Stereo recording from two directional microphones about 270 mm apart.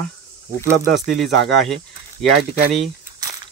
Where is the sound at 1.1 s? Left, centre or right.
Centre.